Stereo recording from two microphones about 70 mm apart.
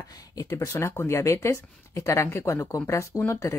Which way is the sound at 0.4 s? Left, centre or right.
Left.